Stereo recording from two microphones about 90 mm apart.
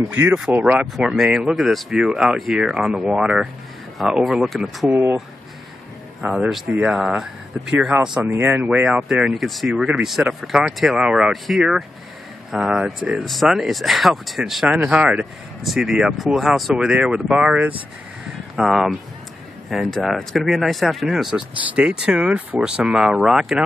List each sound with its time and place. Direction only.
0.1 s speech: 20° right (ahead or behind)
0.9 s speech: 5° right (ahead or behind)
6.7 s speech: 10° right (ahead or behind)
14.8 s speech: 15° right (ahead or behind)
18.6 s speech: 5° right (ahead or behind)